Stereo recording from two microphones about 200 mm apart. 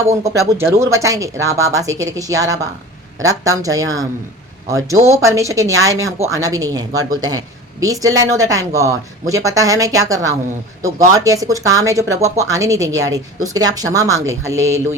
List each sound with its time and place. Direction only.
0.3 s speech: 15° right (ahead or behind)